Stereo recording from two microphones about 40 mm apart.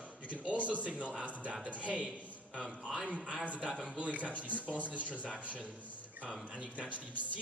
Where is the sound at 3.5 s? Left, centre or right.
Right.